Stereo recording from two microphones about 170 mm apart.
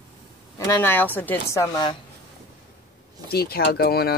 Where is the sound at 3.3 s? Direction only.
65° left (ahead or behind).